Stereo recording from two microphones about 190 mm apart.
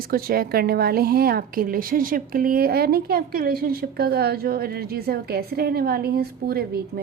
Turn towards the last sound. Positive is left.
turn(degrees=-55)  # may be behind; listen again after turning